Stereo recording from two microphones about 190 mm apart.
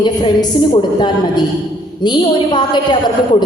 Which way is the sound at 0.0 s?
25° left (ahead or behind).